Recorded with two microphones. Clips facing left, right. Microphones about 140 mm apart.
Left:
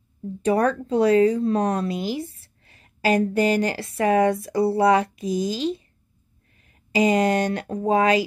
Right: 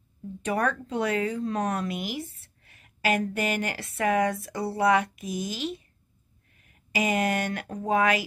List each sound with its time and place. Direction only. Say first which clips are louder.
0.4 s speech: left 7 dB; 35° left (ahead or behind)